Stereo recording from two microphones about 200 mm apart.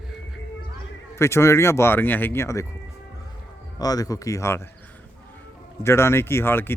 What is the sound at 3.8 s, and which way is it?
Speech, 20° left (ahead or behind).